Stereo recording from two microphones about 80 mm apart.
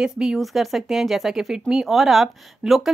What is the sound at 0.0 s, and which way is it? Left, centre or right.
Speech, centre.